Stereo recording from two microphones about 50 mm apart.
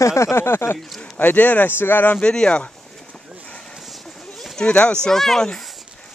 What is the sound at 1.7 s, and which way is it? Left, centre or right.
Speech, left.